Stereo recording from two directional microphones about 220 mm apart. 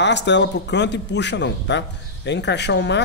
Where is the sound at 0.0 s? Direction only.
50° left (ahead or behind).